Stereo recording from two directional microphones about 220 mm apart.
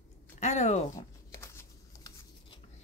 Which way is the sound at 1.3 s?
15° left (ahead or behind).